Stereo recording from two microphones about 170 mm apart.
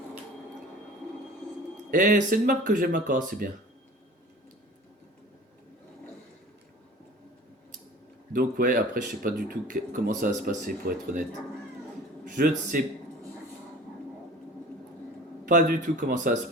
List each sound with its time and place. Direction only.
1.9 s speech: 55° right (ahead or behind)
8.3 s speech: 55° right (ahead or behind)
12.3 s speech: 55° right (ahead or behind)
15.4 s speech: 55° right (ahead or behind)